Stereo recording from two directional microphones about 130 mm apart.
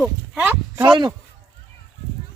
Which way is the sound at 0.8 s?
35° right (ahead or behind).